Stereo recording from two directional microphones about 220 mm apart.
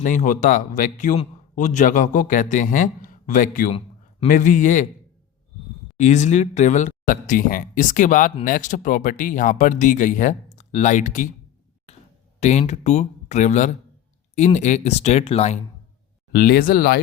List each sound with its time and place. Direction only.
0.0 s speech: 35° left (ahead or behind)
6.0 s speech: 35° left (ahead or behind)
12.4 s speech: 30° left (ahead or behind)
16.3 s speech: 45° left (ahead or behind)